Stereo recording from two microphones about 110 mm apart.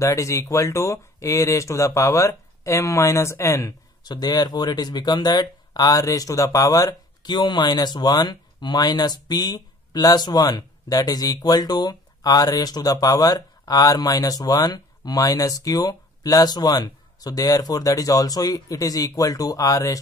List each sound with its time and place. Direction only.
0.0 s speech: 30° left (ahead or behind)
4.0 s speech: 40° left (ahead or behind)